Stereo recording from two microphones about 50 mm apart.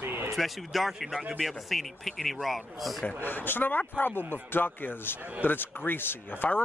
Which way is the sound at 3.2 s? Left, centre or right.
Left.